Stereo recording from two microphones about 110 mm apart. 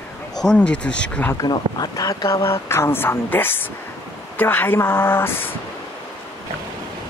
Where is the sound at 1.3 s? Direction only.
35° left (ahead or behind); by 5.6 s 20° left (ahead or behind).